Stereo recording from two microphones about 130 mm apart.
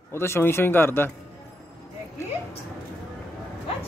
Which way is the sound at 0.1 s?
20° left (ahead or behind).